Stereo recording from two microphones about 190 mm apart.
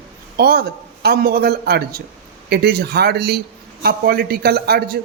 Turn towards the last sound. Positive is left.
turn(degrees=-55)  # may be behind; listen again after turning